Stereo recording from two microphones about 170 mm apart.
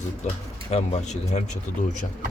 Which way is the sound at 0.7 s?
40° left (ahead or behind).